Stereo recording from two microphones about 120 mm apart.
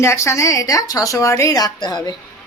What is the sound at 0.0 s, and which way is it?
Speech, 25° left (ahead or behind).